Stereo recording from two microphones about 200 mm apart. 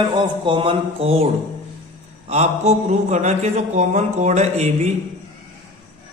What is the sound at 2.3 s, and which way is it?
A man's voice, 35° right (ahead or behind).